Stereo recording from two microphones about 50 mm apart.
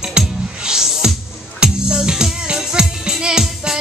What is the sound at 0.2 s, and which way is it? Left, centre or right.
Music, centre.